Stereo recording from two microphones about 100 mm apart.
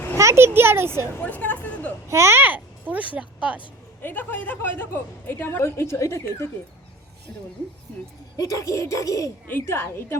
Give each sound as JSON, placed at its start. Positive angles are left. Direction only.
{"t": 0.2, "sound": "a child's voice", "side_deg": -25}
{"t": 1.2, "sound": "a sound", "side_deg": 15}
{"t": 2.0, "sound": "a child's voice", "side_deg": -30}
{"t": 4.0, "sound": "a woman's voice", "side_deg": 20}
{"t": 8.4, "sound": "speech", "side_deg": 35}
{"t": 9.5, "sound": "a woman's voice", "side_deg": 25}